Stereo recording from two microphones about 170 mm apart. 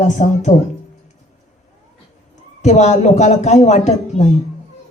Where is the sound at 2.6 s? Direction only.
45° left (ahead or behind).